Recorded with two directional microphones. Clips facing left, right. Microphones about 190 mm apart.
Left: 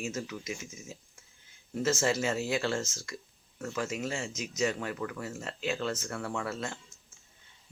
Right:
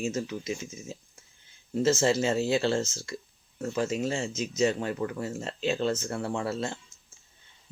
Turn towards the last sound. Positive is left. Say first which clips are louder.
# right 5 dB
turn(degrees=-30)  # may be behind; listen again after turning